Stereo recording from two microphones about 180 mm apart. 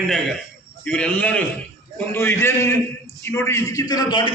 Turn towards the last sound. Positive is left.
turn(degrees=25)  # may be behind; listen again after turning